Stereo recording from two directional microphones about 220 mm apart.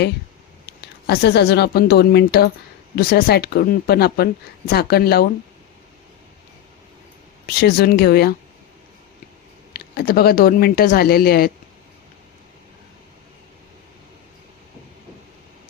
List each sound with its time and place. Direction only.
0.6 s a woman's voice: 45° left (ahead or behind)
7.4 s a woman's voice: 45° left (ahead or behind)
9.7 s a woman's voice: 45° left (ahead or behind)